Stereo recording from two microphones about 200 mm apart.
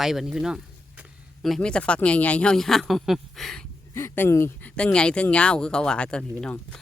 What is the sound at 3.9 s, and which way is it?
Speech, 15° left (ahead or behind).